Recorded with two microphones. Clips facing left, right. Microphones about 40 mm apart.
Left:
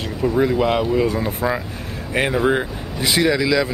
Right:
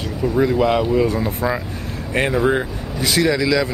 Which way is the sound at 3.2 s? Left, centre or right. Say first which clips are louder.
Even; centre.